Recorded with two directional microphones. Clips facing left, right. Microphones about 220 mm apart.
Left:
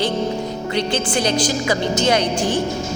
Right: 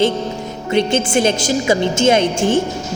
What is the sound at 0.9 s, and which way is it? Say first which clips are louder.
A woman's voice: right 4 dB; 25° right (ahead or behind).